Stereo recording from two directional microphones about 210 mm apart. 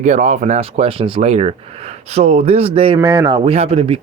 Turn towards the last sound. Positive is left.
turn(degrees=-30)  # may be behind; listen again after turning